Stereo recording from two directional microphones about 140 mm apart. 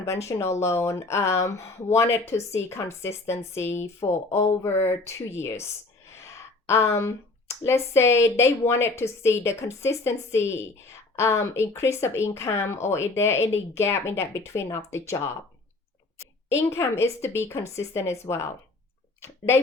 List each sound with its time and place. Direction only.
0.1 s speech: 20° left (ahead or behind)
16.6 s speech: 20° left (ahead or behind)